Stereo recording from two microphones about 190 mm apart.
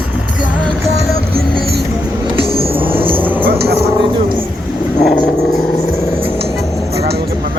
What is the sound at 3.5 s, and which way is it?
Speech, 55° right (ahead or behind).